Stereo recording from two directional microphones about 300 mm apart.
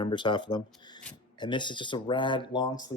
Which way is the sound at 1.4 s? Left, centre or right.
Centre.